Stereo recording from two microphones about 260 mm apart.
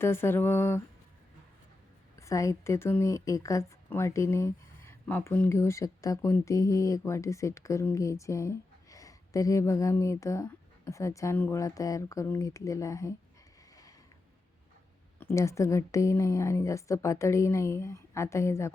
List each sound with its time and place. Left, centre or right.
0.0 s speech: centre
2.1 s speech: centre
15.2 s speech: centre